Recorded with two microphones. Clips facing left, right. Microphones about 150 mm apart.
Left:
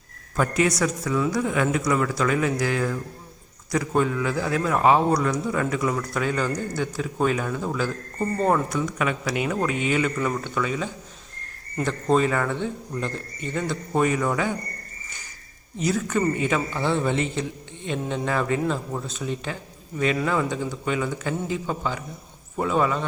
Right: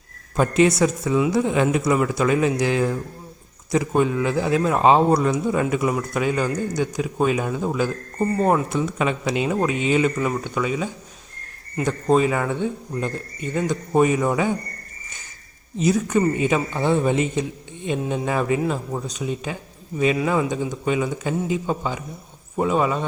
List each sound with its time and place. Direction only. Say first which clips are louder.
0.3 s a man's voice: right 5 dB; 20° right (ahead or behind)
8.7 s a man's voice: right 3 dB; 25° right (ahead or behind)
15.8 s a man's voice: right 4 dB; 20° right (ahead or behind)